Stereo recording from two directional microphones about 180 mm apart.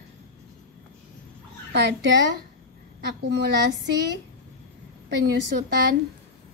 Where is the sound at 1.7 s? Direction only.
70° right (ahead or behind).